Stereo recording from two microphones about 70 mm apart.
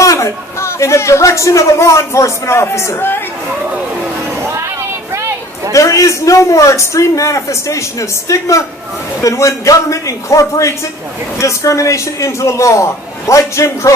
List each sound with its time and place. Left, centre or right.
0.0 s a man's voice: left
4.4 s vehicle: right
5.7 s a man's voice: left